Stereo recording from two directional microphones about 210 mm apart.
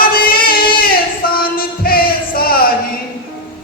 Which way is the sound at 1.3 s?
45° left (ahead or behind).